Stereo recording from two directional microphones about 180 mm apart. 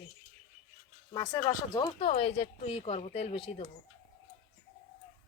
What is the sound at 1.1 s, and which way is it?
Speech, 20° left (ahead or behind).